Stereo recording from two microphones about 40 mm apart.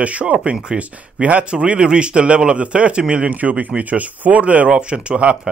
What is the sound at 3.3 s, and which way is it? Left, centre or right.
Speech, right.